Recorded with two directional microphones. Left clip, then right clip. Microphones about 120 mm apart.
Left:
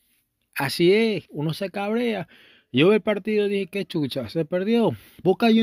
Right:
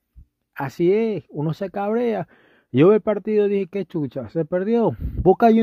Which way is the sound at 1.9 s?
55° right (ahead or behind).